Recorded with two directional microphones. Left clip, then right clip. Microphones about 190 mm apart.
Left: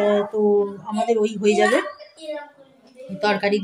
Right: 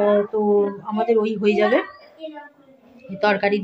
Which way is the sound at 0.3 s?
Centre (ahead or behind).